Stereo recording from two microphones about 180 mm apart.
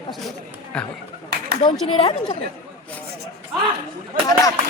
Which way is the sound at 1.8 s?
30° left (ahead or behind).